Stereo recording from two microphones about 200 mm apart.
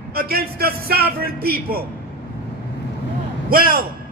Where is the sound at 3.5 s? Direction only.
45° right (ahead or behind).